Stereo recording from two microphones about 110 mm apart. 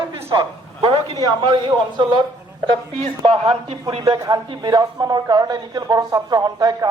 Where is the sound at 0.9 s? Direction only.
35° right (ahead or behind).